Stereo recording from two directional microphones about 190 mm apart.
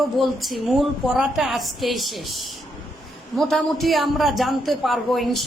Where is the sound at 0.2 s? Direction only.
Centre (ahead or behind).